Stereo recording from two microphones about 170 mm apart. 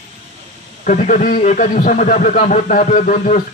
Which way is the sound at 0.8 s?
50° left (ahead or behind).